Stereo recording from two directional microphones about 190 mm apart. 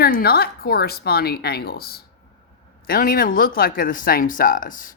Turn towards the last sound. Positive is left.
turn(degrees=45)  # may be behind; listen again after turning